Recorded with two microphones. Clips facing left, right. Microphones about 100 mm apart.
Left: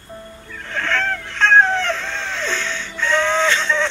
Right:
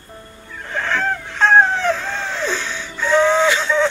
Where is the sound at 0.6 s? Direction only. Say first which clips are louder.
Right 1 dB; 10° right (ahead or behind).